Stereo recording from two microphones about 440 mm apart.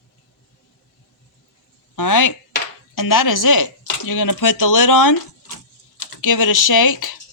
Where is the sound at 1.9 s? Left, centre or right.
Left.